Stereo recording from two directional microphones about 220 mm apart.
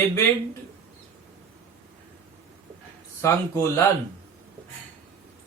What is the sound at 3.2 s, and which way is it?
Speech, 15° left (ahead or behind).